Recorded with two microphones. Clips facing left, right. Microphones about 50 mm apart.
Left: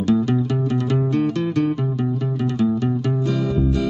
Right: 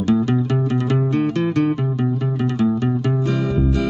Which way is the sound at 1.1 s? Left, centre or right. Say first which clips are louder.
Right 1 dB; right.